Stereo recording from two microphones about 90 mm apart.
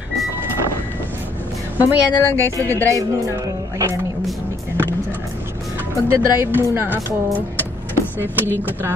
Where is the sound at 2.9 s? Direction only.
40° right (ahead or behind).